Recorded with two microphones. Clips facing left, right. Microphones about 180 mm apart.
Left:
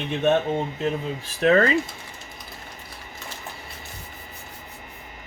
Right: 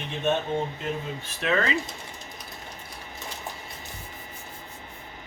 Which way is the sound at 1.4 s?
40° left (ahead or behind).